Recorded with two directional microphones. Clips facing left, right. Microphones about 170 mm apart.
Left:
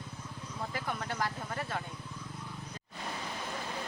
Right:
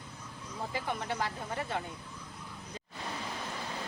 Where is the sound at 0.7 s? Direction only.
20° right (ahead or behind).